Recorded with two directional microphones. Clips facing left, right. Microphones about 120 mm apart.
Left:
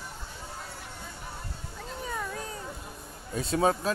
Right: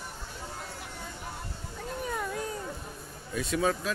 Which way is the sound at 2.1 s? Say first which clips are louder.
Right 1 dB; 5° right (ahead or behind).